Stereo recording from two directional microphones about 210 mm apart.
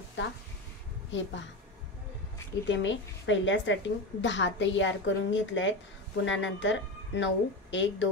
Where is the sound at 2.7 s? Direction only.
60° left (ahead or behind).